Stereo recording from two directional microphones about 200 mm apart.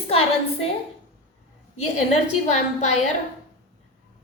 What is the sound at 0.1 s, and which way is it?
Speech, 30° left (ahead or behind).